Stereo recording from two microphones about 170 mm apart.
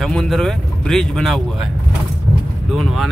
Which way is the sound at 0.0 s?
Centre (ahead or behind).